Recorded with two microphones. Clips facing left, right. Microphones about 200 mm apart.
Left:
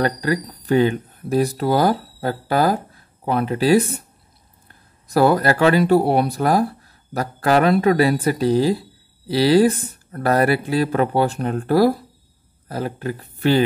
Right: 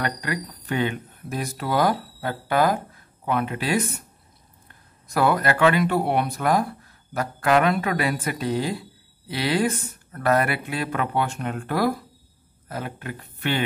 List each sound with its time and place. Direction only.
0.0 s speech: 35° left (ahead or behind)
5.0 s speech: 35° left (ahead or behind)